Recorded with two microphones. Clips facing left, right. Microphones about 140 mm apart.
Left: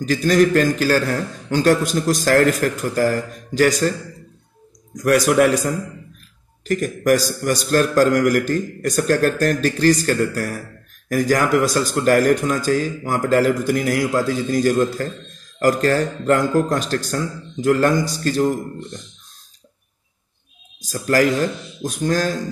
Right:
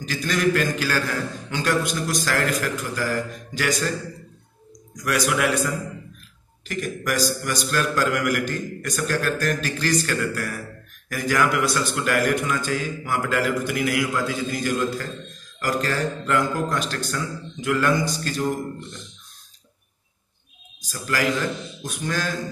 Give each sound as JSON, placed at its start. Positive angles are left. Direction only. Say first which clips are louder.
{"t": 0.0, "sound": "a man's voice", "louder": "left 7 dB", "side_deg": 45}
{"t": 4.9, "sound": "a man's voice", "louder": "left 8 dB", "side_deg": 45}
{"t": 20.8, "sound": "a man's voice", "louder": "left 7 dB", "side_deg": 45}